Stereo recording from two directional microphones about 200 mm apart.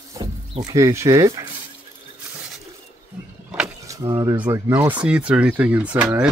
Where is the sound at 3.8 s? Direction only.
15° right (ahead or behind).